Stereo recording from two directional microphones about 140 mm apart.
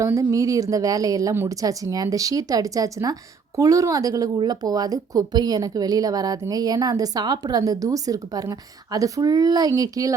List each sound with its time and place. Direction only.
0.0 s a woman's voice: 20° right (ahead or behind)